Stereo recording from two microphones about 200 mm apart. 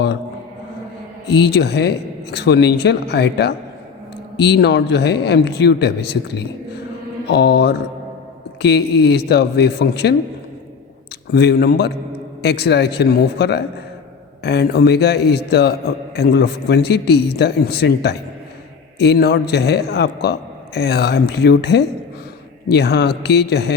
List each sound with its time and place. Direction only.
1.3 s a man's voice: 55° left (ahead or behind)
11.3 s a man's voice: 55° left (ahead or behind)